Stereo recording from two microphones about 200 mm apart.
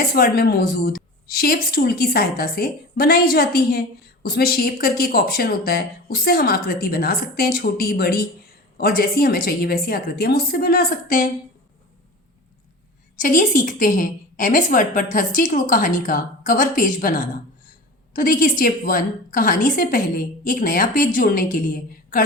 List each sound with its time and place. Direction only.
0.0 s a woman's voice: 50° left (ahead or behind)
13.2 s a woman's voice: 40° left (ahead or behind)